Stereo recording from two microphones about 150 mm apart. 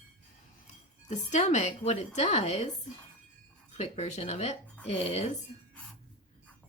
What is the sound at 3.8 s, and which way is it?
Speech, 50° left (ahead or behind).